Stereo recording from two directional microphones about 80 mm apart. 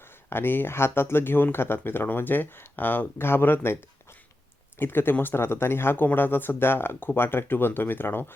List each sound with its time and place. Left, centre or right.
0.3 s speech: left
4.8 s speech: left